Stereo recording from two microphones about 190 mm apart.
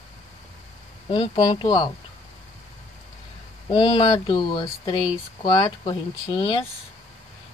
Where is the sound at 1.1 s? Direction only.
25° left (ahead or behind).